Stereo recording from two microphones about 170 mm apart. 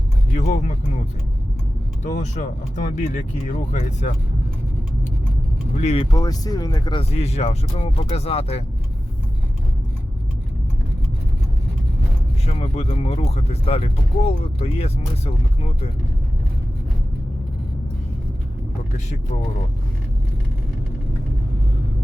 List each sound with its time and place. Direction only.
0.3 s speech: 45° left (ahead or behind)
2.1 s speech: 45° left (ahead or behind)
5.8 s speech: 35° left (ahead or behind)
6.1 s speech: 20° left (ahead or behind)
7.0 s speech: 35° left (ahead or behind)
12.5 s speech: 40° left (ahead or behind)